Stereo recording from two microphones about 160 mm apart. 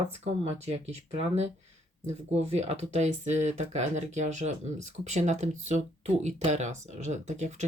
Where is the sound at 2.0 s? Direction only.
45° right (ahead or behind).